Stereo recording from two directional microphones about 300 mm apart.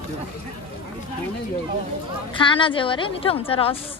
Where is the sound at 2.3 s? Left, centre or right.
Centre.